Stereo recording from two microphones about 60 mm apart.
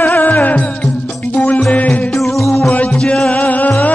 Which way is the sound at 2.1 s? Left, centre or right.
Centre.